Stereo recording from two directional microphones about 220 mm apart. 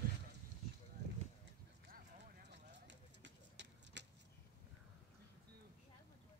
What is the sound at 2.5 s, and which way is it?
Clip-clop, 55° right (ahead or behind).